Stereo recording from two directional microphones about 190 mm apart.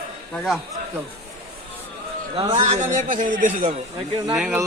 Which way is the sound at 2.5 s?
35° right (ahead or behind).